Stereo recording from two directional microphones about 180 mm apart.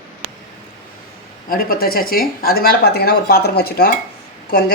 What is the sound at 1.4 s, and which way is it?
Speech, 55° left (ahead or behind).